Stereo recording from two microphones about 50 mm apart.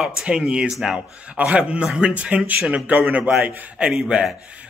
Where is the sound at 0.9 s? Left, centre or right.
Right.